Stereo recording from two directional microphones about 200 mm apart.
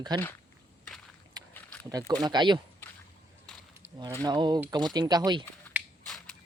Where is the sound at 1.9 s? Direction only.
20° right (ahead or behind).